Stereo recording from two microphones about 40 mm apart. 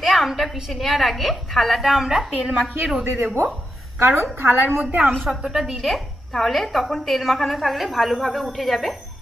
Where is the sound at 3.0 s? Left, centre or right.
Right.